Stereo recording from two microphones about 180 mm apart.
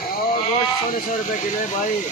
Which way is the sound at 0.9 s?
45° left (ahead or behind).